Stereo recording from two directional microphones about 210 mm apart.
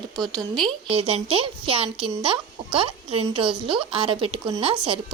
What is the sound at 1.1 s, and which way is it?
Speech, 25° right (ahead or behind).